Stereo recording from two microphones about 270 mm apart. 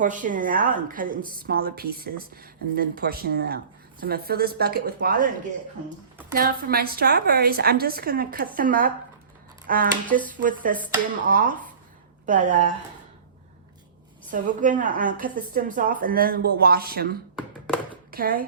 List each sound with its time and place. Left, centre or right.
0.0 s a woman's voice: right
6.3 s a woman's voice: right
14.3 s a woman's voice: right
18.1 s speech: right